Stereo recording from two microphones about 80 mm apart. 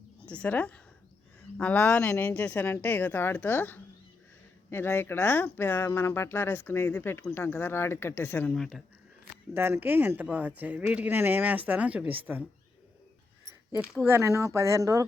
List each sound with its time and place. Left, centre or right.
0.3 s speech: centre
8.5 s speech: centre
9.6 s speech: right
13.7 s speech: centre
14.2 s speech: right